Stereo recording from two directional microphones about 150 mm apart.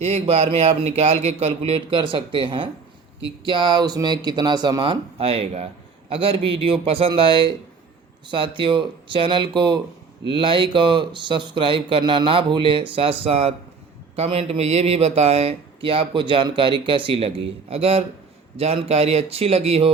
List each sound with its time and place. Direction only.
0.0 s speech: 45° right (ahead or behind)